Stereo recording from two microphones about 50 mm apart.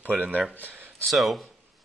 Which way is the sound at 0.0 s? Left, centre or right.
Right.